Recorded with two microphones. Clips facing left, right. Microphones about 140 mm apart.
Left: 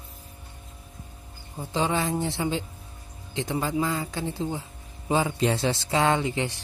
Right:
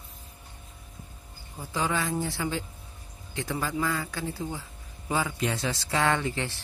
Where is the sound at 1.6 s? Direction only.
25° left (ahead or behind).